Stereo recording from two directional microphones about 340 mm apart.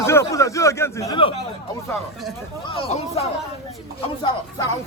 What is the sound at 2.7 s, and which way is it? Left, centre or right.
Speech, centre.